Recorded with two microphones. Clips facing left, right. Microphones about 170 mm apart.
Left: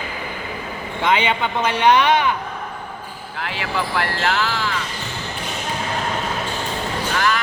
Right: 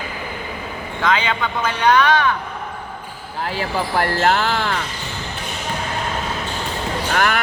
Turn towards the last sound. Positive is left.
turn(degrees=-55)  # may be behind; listen again after turning